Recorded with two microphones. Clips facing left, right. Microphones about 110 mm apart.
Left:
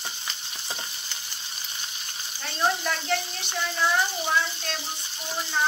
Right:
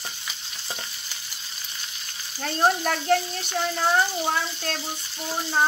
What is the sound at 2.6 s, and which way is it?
Speech, 45° right (ahead or behind).